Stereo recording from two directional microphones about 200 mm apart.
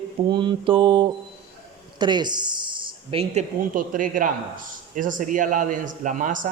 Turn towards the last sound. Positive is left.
turn(degrees=-40)  # may be behind; listen again after turning